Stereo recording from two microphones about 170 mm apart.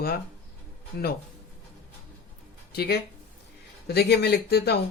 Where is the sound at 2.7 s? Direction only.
70° left (ahead or behind).